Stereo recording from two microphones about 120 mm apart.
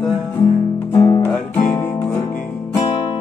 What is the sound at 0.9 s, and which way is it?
Music, 30° left (ahead or behind).